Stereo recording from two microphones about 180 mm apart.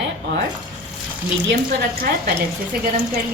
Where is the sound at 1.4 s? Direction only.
65° right (ahead or behind).